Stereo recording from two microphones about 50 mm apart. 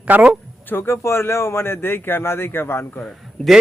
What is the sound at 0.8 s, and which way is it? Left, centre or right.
A man's voice, left.